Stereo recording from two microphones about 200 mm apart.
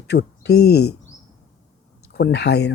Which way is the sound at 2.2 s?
55° left (ahead or behind).